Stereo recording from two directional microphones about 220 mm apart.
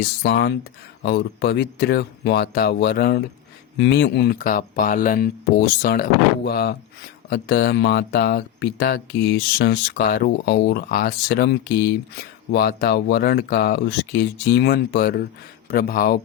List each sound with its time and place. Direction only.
0.2 s speech: 50° left (ahead or behind)